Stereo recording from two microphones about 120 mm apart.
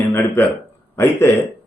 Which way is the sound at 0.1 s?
20° left (ahead or behind).